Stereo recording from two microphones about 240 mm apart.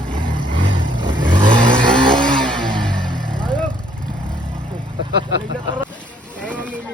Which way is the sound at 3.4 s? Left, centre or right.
Centre.